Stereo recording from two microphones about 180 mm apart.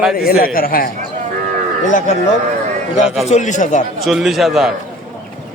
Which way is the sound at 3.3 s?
40° left (ahead or behind).